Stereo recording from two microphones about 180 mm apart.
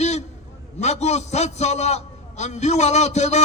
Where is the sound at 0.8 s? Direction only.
40° left (ahead or behind).